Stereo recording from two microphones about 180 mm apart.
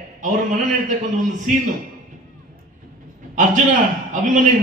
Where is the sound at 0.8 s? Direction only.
45° right (ahead or behind).